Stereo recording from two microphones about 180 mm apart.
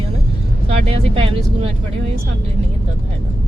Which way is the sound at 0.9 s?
30° right (ahead or behind).